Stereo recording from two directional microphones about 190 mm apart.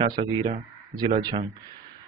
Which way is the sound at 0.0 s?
25° right (ahead or behind).